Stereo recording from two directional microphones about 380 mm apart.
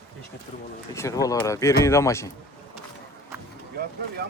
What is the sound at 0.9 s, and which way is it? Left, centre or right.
Speech, centre.